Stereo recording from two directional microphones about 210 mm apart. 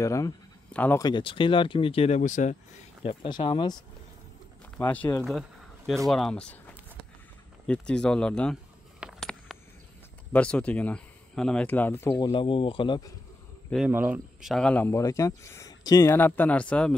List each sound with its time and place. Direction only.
0.0 s speech: 15° left (ahead or behind)
1.0 s speech: 25° left (ahead or behind)
3.0 s speech: 25° left (ahead or behind)
4.7 s speech: 10° left (ahead or behind)
7.6 s speech: 5° left (ahead or behind)
9.0 s a sound: centre (ahead or behind)
10.3 s speech: 5° left (ahead or behind)
12.3 s speech: 25° left (ahead or behind)
13.8 s speech: 10° right (ahead or behind)